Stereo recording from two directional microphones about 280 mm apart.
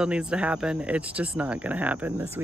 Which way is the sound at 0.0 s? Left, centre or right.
Centre.